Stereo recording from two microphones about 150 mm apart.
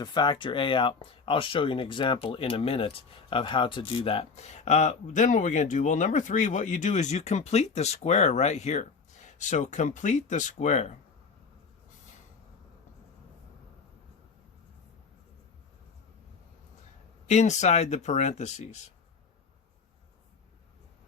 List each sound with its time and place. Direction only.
0.0 s speech: 30° left (ahead or behind); by 10.9 s 50° left (ahead or behind)
17.2 s speech: 50° left (ahead or behind)